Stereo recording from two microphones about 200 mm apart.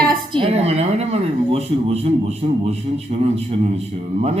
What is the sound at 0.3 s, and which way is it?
Speech, 30° right (ahead or behind).